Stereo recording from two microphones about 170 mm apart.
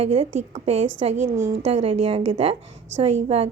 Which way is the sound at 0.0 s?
40° right (ahead or behind).